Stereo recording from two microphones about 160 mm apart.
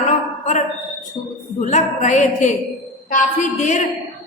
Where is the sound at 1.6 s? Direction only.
50° left (ahead or behind).